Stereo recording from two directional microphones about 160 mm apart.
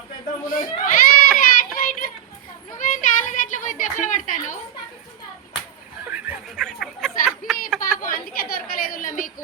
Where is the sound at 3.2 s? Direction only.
55° left (ahead or behind).